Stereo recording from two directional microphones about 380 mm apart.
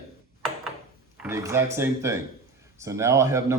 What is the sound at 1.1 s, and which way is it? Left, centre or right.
Speech, centre.